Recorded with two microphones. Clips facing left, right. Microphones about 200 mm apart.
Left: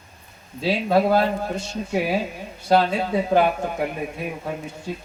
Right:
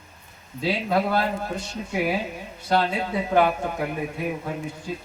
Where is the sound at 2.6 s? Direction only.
35° left (ahead or behind).